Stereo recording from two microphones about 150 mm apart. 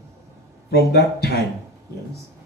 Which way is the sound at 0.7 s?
90° left.